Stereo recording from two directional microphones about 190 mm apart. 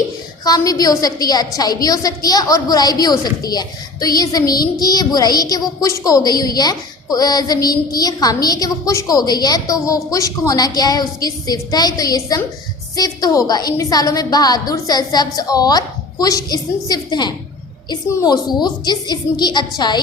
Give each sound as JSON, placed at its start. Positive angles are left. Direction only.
{"t": 0.4, "sound": "a woman's voice", "side_deg": 20}